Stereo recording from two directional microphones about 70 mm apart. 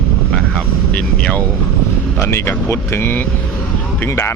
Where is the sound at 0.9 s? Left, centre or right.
Centre.